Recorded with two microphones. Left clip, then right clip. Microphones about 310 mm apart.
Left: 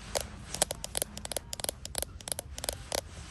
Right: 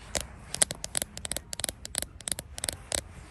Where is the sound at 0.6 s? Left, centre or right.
Right.